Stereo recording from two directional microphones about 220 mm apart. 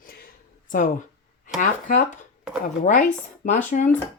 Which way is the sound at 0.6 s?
35° left (ahead or behind).